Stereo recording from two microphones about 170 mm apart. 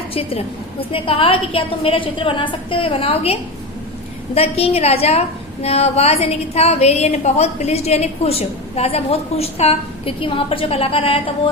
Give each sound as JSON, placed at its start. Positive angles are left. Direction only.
{"t": 0.1, "sound": "a woman's voice", "side_deg": 35}
{"t": 4.4, "sound": "a woman's voice", "side_deg": 35}